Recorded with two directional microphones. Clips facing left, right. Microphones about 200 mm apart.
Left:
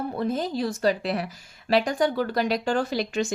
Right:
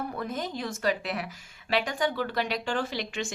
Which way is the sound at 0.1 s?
30° left (ahead or behind).